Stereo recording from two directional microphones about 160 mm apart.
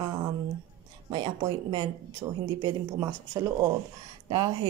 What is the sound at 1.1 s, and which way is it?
Speech, 30° right (ahead or behind).